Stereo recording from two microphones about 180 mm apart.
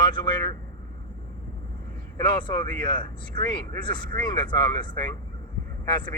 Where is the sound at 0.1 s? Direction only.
25° left (ahead or behind).